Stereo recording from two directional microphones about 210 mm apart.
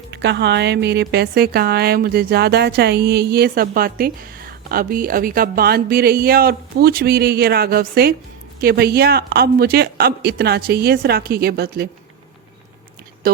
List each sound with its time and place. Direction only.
0.1 s a woman's voice: 55° right (ahead or behind)
13.2 s speech: 45° right (ahead or behind)